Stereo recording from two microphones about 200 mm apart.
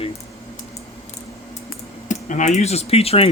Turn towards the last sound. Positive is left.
turn(degrees=30)  # may be behind; listen again after turning